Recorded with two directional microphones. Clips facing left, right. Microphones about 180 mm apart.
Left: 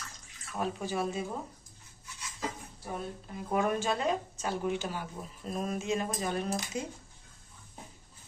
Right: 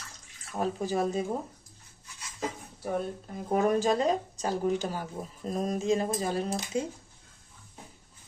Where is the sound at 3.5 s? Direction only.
35° right (ahead or behind).